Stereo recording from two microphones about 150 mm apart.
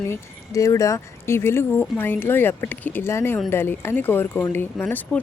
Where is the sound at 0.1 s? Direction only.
20° left (ahead or behind).